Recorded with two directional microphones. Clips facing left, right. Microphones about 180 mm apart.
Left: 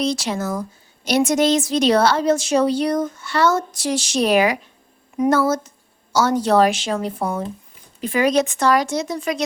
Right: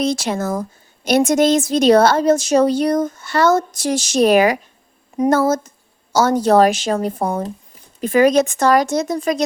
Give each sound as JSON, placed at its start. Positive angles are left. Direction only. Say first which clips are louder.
{"t": 0.0, "sound": "a woman's voice", "louder": "right 3 dB", "side_deg": -50}